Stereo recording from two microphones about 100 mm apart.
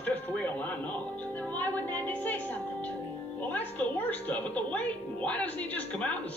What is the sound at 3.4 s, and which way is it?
A woman's voice, 15° left (ahead or behind).